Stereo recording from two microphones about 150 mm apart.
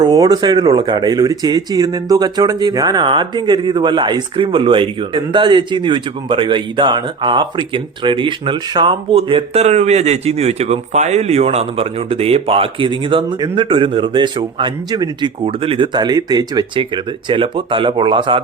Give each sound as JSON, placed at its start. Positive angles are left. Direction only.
{"t": 0.0, "sound": "speech", "side_deg": -25}